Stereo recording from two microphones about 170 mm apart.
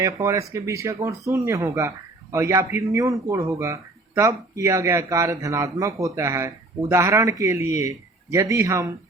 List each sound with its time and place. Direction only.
0.0 s speech: 15° right (ahead or behind)